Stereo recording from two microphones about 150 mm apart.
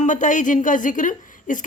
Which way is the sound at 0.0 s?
55° left (ahead or behind).